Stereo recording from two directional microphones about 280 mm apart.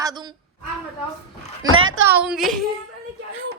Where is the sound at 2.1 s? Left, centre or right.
Centre.